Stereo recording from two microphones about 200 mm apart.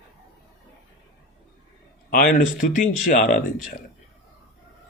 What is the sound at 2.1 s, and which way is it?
Speech, 45° left (ahead or behind).